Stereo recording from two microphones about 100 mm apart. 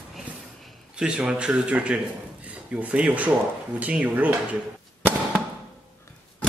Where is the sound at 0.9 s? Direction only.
10° right (ahead or behind).